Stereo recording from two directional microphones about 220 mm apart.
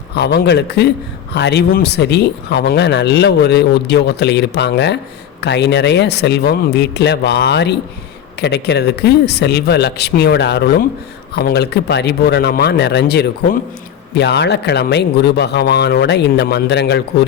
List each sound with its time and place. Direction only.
0.2 s speech: 50° left (ahead or behind)